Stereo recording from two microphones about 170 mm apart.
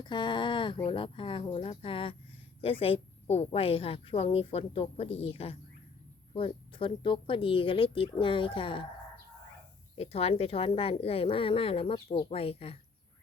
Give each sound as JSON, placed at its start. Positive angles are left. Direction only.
{"t": 0.0, "sound": "a sound", "side_deg": 25}
{"t": 0.9, "sound": "a woman's voice", "side_deg": 30}
{"t": 10.0, "sound": "a woman's voice", "side_deg": 40}